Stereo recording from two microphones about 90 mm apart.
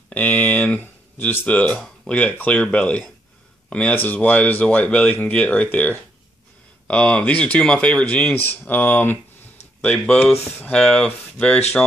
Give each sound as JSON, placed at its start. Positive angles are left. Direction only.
{"t": 0.1, "sound": "speech", "side_deg": 20}